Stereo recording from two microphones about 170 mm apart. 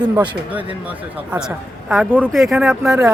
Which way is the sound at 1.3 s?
5° right (ahead or behind).